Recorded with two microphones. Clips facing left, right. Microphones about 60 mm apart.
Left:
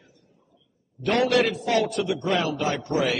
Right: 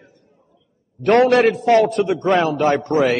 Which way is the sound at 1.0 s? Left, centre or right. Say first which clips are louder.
Right 8 dB; right.